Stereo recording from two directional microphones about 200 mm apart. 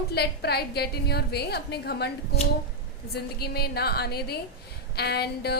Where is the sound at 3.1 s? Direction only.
50° left (ahead or behind).